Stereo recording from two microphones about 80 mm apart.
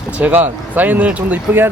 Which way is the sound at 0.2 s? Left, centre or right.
Right.